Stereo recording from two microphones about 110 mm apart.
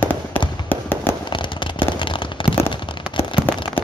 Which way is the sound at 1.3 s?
45° left (ahead or behind).